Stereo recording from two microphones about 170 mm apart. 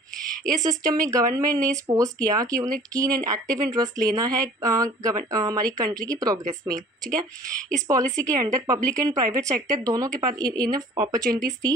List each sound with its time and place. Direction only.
0.6 s speech: 20° right (ahead or behind)